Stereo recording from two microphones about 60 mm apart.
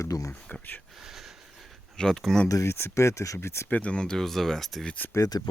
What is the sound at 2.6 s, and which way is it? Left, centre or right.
Speech, left.